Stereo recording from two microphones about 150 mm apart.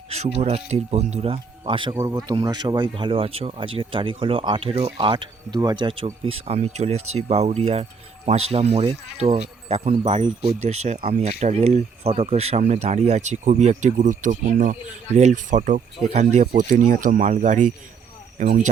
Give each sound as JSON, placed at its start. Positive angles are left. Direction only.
{"t": 0.1, "sound": "speech", "side_deg": -45}
{"t": 16.6, "sound": "speech", "side_deg": -60}